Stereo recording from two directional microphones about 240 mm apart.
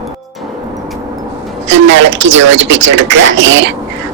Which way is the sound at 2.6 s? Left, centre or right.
Right.